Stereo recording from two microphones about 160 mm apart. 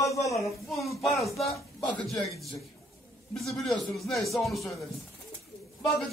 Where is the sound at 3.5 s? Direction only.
Centre (ahead or behind).